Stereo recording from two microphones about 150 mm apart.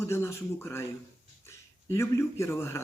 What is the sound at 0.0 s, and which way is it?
Speech, 15° left (ahead or behind).